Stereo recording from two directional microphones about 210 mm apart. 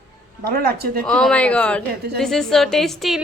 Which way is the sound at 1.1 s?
5° left (ahead or behind).